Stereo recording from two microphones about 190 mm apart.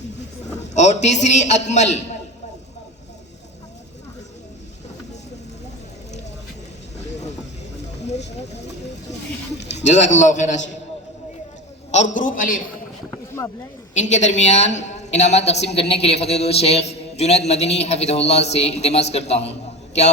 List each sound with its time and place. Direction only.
0.4 s a sound: 35° left (ahead or behind)
1.0 s a woman's voice: 40° left (ahead or behind)
7.0 s vehicle: 35° left (ahead or behind)
9.7 s a woman's voice: 40° left (ahead or behind)
11.9 s a man's voice: 40° left (ahead or behind)
13.9 s a woman's voice: 40° left (ahead or behind)